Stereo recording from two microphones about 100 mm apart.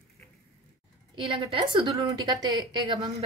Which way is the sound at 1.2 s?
55° right (ahead or behind).